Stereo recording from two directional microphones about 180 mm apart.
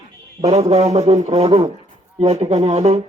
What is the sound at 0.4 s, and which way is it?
Speech, 35° right (ahead or behind).